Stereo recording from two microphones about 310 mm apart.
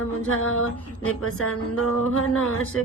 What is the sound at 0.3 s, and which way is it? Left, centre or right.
Mantra, left.